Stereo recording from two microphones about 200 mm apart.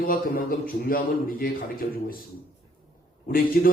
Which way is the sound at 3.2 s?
45° left (ahead or behind).